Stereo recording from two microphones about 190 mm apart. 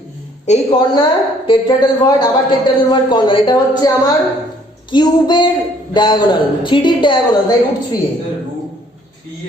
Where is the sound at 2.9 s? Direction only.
25° left (ahead or behind).